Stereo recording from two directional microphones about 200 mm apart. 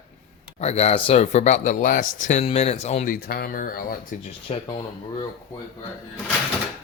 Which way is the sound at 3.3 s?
45° left (ahead or behind).